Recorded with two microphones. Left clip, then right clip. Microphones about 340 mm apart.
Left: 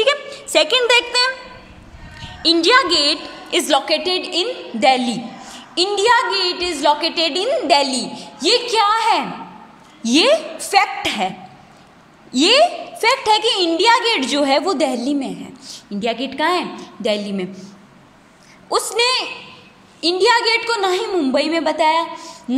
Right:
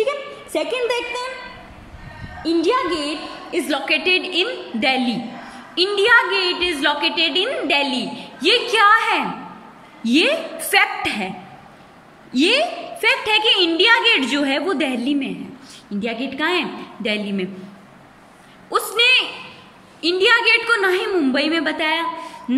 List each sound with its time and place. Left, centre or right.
0.6 s a woman's voice: left
3.5 s a woman's voice: left
12.3 s a woman's voice: left
18.7 s a woman's voice: centre